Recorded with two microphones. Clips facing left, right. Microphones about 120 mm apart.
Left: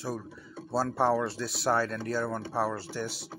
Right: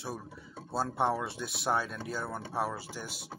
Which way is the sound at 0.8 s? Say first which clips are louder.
Left 4 dB; 15° right (ahead or behind).